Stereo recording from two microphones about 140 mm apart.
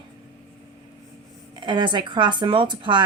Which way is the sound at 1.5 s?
35° right (ahead or behind).